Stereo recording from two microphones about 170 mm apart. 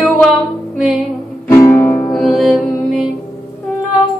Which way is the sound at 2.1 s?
Centre (ahead or behind).